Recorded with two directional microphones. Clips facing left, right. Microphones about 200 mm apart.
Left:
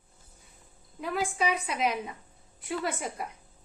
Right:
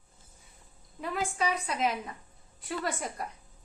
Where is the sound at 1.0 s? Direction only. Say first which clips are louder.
Left 2 dB; 5° left (ahead or behind).